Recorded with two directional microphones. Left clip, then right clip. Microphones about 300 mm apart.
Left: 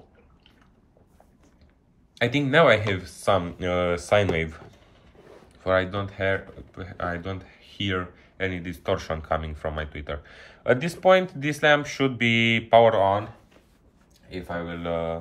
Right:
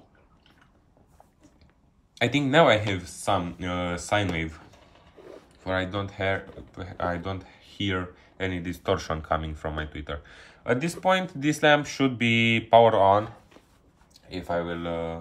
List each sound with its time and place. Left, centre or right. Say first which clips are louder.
2.1 s speech: left 1 dB; centre
5.6 s speech: left 5 dB; centre
14.3 s speech: right 3 dB; centre